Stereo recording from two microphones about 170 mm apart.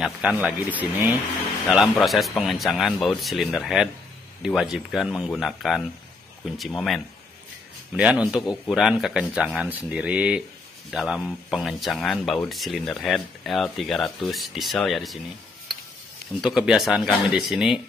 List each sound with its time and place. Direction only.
0.0 s speech: 5° right (ahead or behind)
16.3 s speech: 5° right (ahead or behind)